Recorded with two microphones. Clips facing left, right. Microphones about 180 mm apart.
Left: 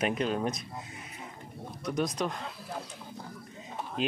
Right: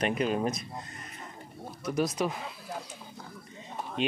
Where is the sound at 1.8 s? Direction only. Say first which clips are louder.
Right 2 dB; centre (ahead or behind).